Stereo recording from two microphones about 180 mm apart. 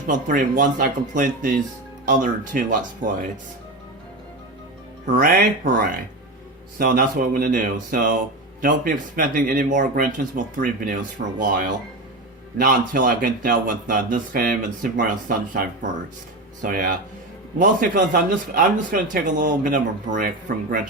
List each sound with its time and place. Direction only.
0.1 s a man's voice: 45° right (ahead or behind)
5.1 s a man's voice: 55° right (ahead or behind)